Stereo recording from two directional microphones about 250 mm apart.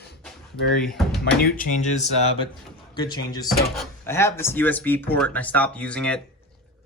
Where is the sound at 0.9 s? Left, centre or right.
Centre.